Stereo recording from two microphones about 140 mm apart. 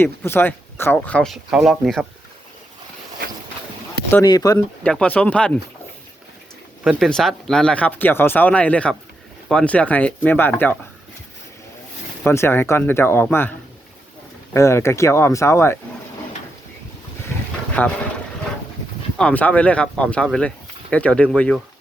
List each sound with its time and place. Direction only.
0.0 s speech: 15° left (ahead or behind); by 2.0 s centre (ahead or behind)
4.1 s speech: 25° left (ahead or behind)
4.8 s speech: 10° left (ahead or behind)
6.8 s speech: 5° left (ahead or behind)
12.2 s speech: 15° left (ahead or behind)
14.5 s speech: 20° left (ahead or behind)
17.8 s speech: 10° left (ahead or behind)
19.1 s speech: 10° left (ahead or behind)